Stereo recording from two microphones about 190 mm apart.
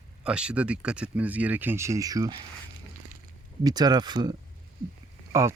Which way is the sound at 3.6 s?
20° right (ahead or behind).